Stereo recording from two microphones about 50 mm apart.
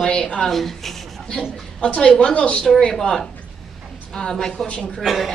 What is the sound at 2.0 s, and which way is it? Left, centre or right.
Speech, centre.